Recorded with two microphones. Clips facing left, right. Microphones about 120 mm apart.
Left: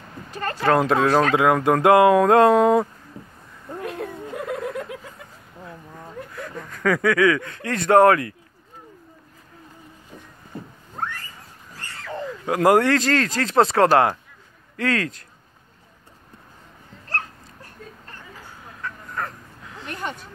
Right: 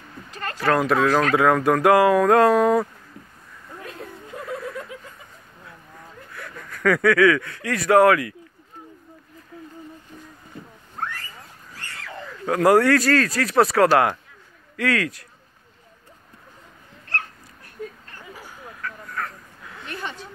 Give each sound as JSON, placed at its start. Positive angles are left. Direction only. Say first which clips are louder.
{"t": 0.5, "sound": "speech", "louder": "left 2 dB", "side_deg": 20}
{"t": 3.8, "sound": "snicker", "louder": "left 7 dB", "side_deg": 65}
{"t": 6.3, "sound": "speech", "louder": "left 4 dB", "side_deg": 15}
{"t": 12.3, "sound": "speech", "louder": "even", "side_deg": 20}
{"t": 18.8, "sound": "duck", "louder": "left 1 dB", "side_deg": 25}
{"t": 19.9, "sound": "a sound", "louder": "left 2 dB", "side_deg": 45}